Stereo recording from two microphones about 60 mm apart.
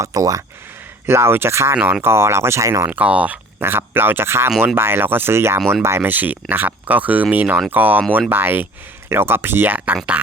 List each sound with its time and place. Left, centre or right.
0.0 s speech: right
1.0 s speech: right
1.7 s speech: right
2.9 s speech: right
3.6 s speech: right
6.0 s speech: right